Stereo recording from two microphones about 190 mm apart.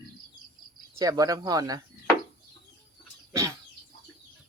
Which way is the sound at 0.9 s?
15° right (ahead or behind).